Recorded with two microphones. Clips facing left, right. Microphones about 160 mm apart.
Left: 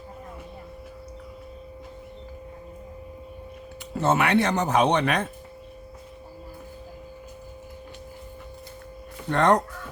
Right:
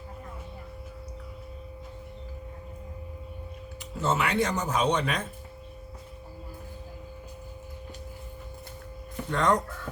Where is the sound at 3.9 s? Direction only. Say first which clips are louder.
Left 5 dB; 65° left (ahead or behind).